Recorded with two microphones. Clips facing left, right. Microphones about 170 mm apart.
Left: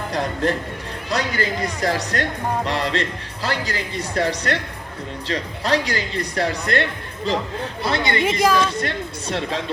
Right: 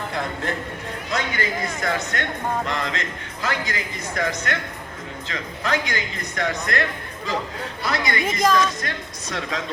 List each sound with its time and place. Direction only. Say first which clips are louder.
0.1 s speech: left 8 dB; 35° left (ahead or behind)
7.9 s speech: left 4 dB; 30° left (ahead or behind)